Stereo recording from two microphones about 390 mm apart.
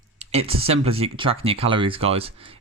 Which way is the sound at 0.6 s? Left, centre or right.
Centre.